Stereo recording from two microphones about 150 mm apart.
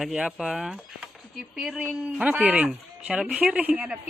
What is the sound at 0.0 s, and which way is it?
Speech, 5° right (ahead or behind).